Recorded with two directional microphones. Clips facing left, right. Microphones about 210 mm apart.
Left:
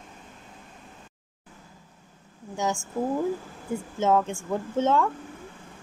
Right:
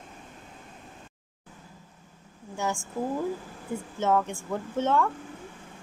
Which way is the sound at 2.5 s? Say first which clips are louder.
Left 3 dB; 15° left (ahead or behind).